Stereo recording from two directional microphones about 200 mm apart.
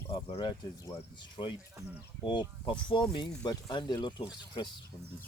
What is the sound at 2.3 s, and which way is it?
Speech, 25° left (ahead or behind).